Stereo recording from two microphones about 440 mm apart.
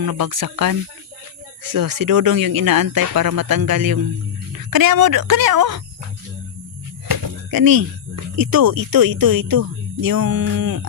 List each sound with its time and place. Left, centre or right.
0.0 s speech: right
7.1 s a sound: right
8.4 s speech: right